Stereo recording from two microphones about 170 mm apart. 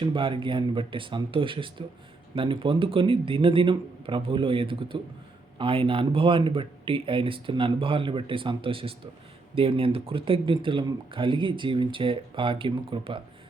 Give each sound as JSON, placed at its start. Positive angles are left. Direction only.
{"t": 0.0, "sound": "speech", "side_deg": -30}